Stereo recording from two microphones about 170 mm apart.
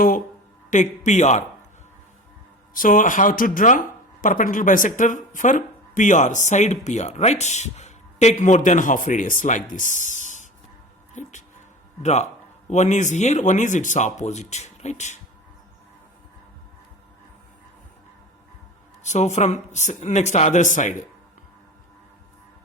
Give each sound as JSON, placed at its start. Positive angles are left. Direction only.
{"t": 0.7, "sound": "speech", "side_deg": 45}
{"t": 2.7, "sound": "speech", "side_deg": 50}
{"t": 11.1, "sound": "a sound", "side_deg": 45}
{"t": 12.0, "sound": "speech", "side_deg": 40}
{"t": 19.0, "sound": "speech", "side_deg": 45}